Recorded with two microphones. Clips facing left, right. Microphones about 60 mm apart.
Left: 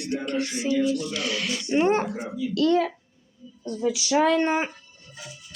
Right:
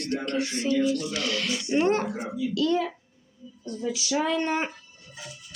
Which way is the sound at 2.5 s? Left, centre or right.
Left.